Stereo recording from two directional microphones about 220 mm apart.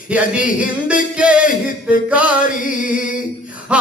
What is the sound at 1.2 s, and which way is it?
Music, 5° right (ahead or behind).